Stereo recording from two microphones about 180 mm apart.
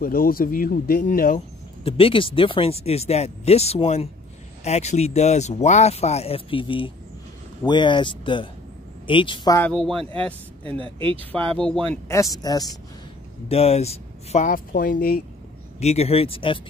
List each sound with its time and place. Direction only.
0.0 s speech: 50° left (ahead or behind)
1.9 s speech: 30° left (ahead or behind)
9.6 s speech: 5° left (ahead or behind)
10.6 s speech: 30° right (ahead or behind)
11.5 s speech: 5° left (ahead or behind)
12.1 s speech: 20° left (ahead or behind)
13.5 s speech: 35° left (ahead or behind); by 15.2 s 55° left (ahead or behind)
15.8 s speech: 35° left (ahead or behind)